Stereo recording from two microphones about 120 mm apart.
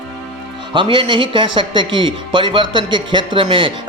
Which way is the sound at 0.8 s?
45° right (ahead or behind).